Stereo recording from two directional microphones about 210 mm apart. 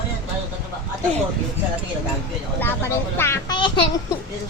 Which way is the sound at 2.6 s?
10° left (ahead or behind).